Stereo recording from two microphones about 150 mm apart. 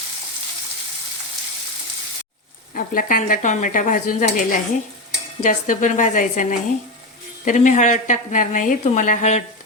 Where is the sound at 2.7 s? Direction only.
65° left (ahead or behind).